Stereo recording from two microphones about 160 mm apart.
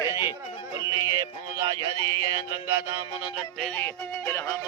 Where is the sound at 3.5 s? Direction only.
5° left (ahead or behind).